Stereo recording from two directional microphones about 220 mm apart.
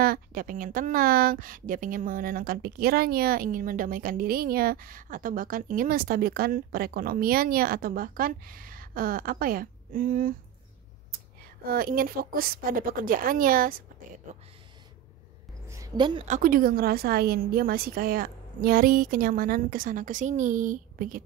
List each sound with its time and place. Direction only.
0.0 s speech: 40° right (ahead or behind)
11.6 s speech: 40° right (ahead or behind)
15.7 s a sound: 20° right (ahead or behind)
16.3 s speech: 35° right (ahead or behind)